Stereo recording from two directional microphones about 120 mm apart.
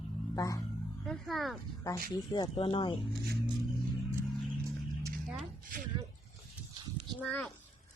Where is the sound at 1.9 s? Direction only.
35° left (ahead or behind).